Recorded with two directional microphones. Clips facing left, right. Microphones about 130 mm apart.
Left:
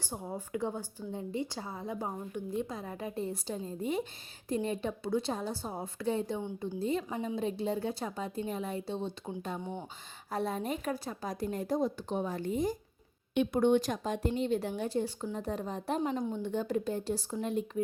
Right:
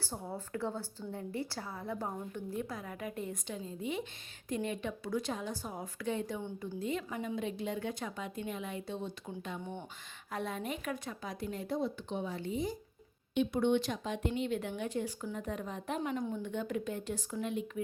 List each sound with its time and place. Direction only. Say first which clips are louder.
0.0 s a woman's voice: left 2 dB; 15° left (ahead or behind); by 16.0 s 35° left (ahead or behind)
16.1 s a woman's voice: left 2 dB; 20° left (ahead or behind)
16.4 s speech: left 4 dB; 35° left (ahead or behind)